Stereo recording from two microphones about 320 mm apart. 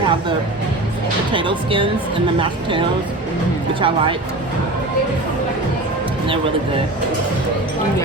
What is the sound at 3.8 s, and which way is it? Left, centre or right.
Speech, centre.